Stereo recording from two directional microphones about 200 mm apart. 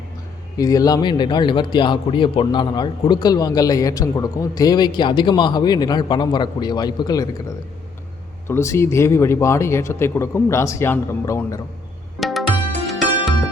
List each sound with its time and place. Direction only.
0.5 s a man's voice: 20° left (ahead or behind)
8.4 s speech: 15° left (ahead or behind)
12.2 s music: centre (ahead or behind)